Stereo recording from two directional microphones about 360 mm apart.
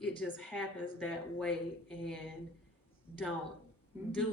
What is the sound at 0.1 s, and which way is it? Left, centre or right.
A woman's voice, centre.